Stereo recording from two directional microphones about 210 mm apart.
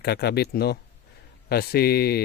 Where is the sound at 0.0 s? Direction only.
50° left (ahead or behind).